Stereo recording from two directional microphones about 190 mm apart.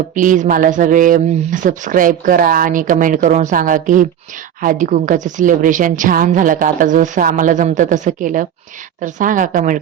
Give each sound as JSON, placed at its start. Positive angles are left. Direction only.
{"t": 0.1, "sound": "speech", "side_deg": -45}